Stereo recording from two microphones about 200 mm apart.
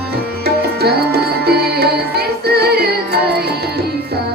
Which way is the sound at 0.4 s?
55° right (ahead or behind).